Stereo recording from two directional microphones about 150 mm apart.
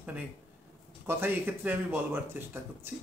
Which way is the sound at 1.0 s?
15° right (ahead or behind).